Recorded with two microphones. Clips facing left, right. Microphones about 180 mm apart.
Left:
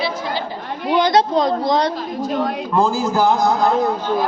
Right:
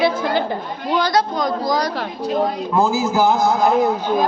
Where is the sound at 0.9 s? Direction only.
25° left (ahead or behind).